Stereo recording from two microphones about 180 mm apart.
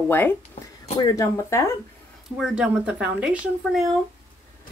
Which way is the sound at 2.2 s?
Centre (ahead or behind).